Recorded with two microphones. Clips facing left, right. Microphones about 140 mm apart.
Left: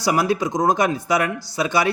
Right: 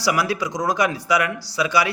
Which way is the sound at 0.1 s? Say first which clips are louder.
Left 3 dB; 45° left (ahead or behind).